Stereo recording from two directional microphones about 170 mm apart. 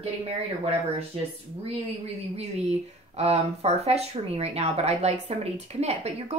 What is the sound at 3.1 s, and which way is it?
Speech, 40° right (ahead or behind).